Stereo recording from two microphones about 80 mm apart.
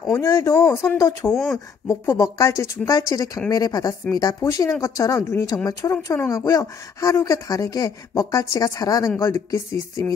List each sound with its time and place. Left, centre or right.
0.2 s speech: left
1.3 s speech: centre
1.9 s speech: left
4.4 s speech: left